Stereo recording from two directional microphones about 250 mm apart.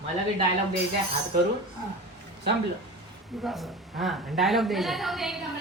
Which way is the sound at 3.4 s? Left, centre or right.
Centre.